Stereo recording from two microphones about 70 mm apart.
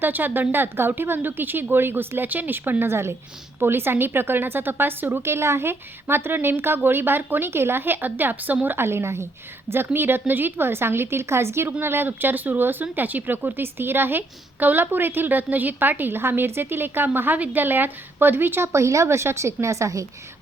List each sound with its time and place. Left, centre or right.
0.0 s a woman's voice: right